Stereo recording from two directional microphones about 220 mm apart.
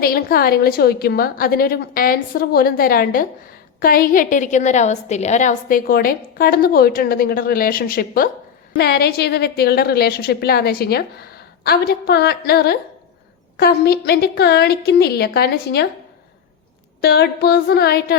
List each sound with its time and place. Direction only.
0.0 s a woman's voice: 45° left (ahead or behind)
17.0 s a woman's voice: 45° left (ahead or behind)